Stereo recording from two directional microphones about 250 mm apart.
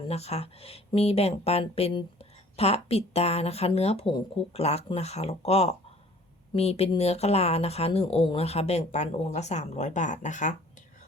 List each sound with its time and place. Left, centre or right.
0.1 s speech: left